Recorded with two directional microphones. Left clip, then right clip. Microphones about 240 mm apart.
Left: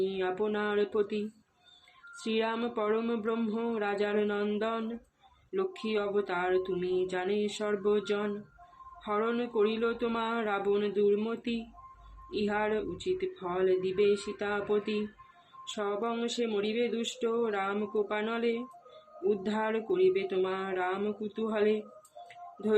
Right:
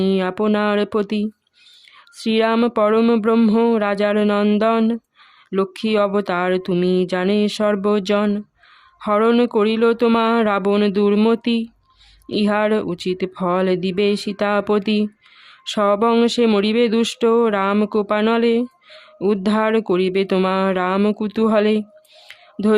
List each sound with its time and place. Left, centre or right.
0.0 s speech: right
2.2 s speech: right